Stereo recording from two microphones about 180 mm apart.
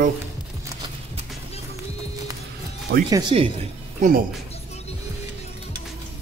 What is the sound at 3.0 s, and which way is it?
Speech, 25° right (ahead or behind).